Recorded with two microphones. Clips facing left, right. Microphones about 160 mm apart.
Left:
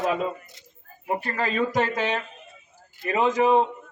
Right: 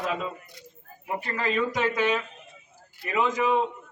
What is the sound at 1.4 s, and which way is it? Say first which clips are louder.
Speech: left 1 dB; 65° left (ahead or behind).